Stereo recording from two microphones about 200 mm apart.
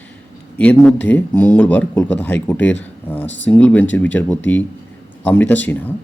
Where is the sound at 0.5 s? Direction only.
5° left (ahead or behind).